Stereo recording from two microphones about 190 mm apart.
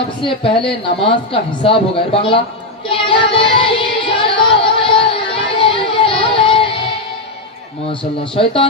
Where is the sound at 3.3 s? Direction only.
30° left (ahead or behind).